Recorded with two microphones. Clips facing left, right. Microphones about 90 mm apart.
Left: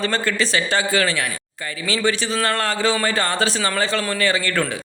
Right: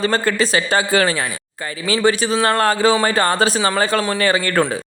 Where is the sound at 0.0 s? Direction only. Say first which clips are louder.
Right 4 dB; 35° right (ahead or behind).